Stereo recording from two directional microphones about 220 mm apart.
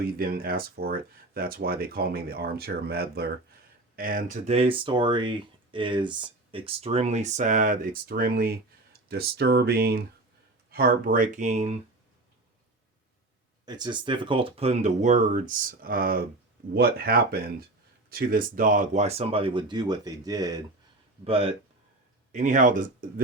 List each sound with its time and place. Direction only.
0.0 s speech: 40° right (ahead or behind)
13.7 s speech: 20° right (ahead or behind); by 23.2 s 40° right (ahead or behind)